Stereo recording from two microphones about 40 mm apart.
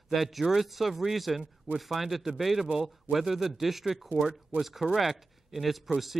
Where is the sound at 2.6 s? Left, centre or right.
Right.